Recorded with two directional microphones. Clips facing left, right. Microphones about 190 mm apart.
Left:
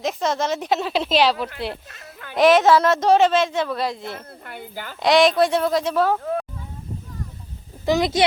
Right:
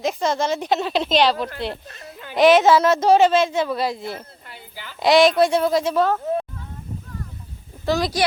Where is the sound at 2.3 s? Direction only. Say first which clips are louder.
Right 1 dB; centre (ahead or behind).